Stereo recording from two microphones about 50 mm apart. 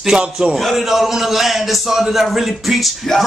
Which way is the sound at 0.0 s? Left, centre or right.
Centre.